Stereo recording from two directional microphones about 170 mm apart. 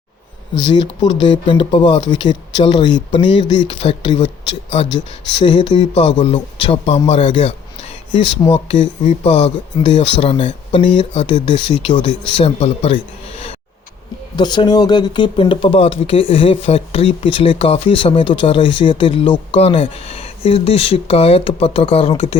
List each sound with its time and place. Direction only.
0.7 s speech: 30° left (ahead or behind)
7.1 s a sound: 30° left (ahead or behind)
8.4 s speech: 35° left (ahead or behind)
11.3 s speech: 25° left (ahead or behind)
14.3 s speech: 25° left (ahead or behind)